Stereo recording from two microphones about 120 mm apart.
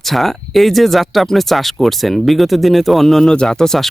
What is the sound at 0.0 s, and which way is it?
Speech, centre (ahead or behind).